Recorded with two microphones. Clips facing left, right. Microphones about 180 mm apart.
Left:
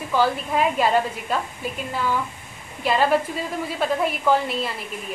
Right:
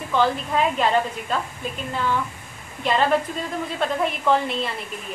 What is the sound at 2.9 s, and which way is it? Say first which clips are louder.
A woman's voice: left 1 dB; 5° left (ahead or behind).